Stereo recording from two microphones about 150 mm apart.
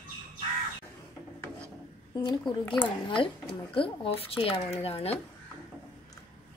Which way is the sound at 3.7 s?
40° left (ahead or behind).